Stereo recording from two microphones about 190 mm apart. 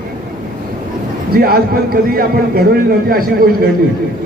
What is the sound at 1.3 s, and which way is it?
A man's voice, 50° right (ahead or behind).